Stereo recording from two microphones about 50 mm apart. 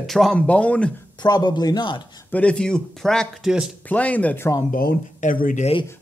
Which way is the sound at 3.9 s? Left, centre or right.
Left.